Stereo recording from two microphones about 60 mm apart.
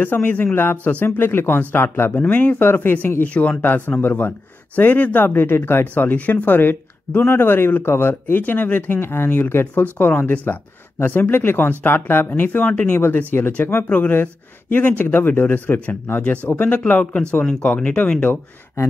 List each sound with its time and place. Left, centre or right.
0.0 s speech: left
6.0 s speech: left
17.5 s speech: centre